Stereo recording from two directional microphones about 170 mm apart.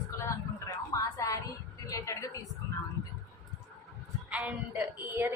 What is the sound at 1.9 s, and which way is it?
Speech, 20° left (ahead or behind).